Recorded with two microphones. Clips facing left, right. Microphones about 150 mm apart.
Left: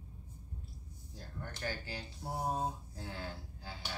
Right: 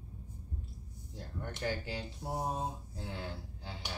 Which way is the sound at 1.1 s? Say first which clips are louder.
Right 4 dB; 20° right (ahead or behind).